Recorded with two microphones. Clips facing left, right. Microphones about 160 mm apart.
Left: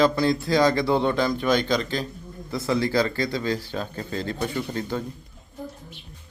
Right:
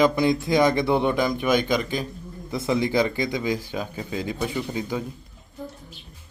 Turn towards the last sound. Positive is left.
turn(degrees=-10)  # may be behind; listen again after turning